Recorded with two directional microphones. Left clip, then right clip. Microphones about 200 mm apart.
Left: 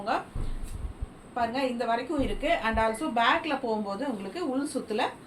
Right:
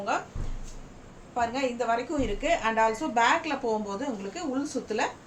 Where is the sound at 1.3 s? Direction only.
20° right (ahead or behind).